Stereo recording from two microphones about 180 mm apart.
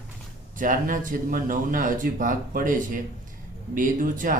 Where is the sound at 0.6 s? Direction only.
50° right (ahead or behind).